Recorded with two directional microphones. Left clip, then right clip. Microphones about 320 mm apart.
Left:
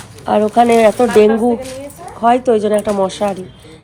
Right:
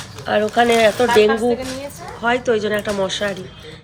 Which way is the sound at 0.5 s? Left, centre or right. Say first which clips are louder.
Left 4 dB; centre.